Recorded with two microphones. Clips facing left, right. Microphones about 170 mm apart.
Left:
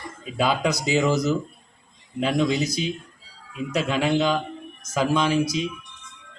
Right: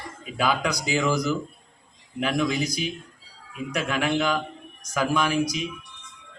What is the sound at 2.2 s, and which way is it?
Speech, 20° left (ahead or behind).